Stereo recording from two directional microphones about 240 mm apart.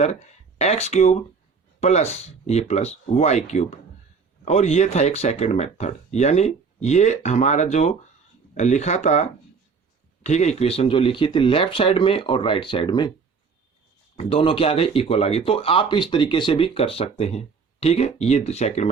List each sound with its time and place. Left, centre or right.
0.6 s speech: left
14.2 s speech: left